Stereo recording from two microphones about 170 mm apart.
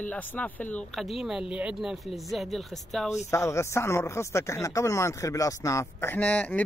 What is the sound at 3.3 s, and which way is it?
Speech, 15° left (ahead or behind).